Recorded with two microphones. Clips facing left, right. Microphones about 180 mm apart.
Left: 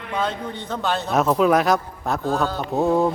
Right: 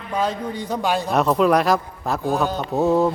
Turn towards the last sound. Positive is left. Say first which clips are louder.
# right 1 dB
turn(degrees=0)  # may be behind; listen again after turning